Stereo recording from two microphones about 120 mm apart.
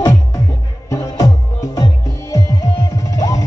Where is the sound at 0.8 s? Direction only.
25° left (ahead or behind).